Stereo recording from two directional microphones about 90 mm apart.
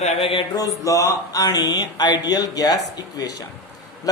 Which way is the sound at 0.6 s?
40° left (ahead or behind).